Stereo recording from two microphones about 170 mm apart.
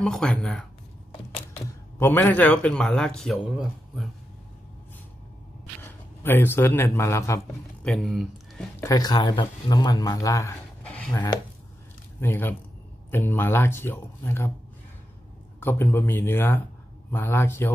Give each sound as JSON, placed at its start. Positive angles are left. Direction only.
{"t": 0.0, "sound": "speech", "side_deg": 5}
{"t": 2.0, "sound": "a man's voice", "side_deg": 15}
{"t": 5.8, "sound": "a man's voice", "side_deg": 10}
{"t": 7.8, "sound": "speech", "side_deg": 0}
{"t": 8.8, "sound": "speech", "side_deg": 20}
{"t": 10.8, "sound": "a sound", "side_deg": 5}
{"t": 12.2, "sound": "a man's voice", "side_deg": 10}
{"t": 15.6, "sound": "a man's voice", "side_deg": 10}